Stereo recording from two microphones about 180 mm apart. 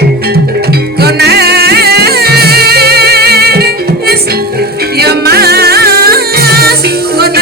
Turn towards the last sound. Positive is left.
turn(degrees=-60)  # may be behind; listen again after turning